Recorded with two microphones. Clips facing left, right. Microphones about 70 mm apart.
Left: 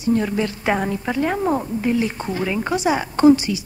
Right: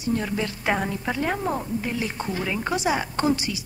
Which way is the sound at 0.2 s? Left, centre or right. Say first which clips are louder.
Left 5 dB; centre.